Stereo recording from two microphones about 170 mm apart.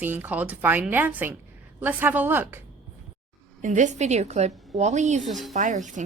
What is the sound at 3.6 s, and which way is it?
Speech, 45° right (ahead or behind).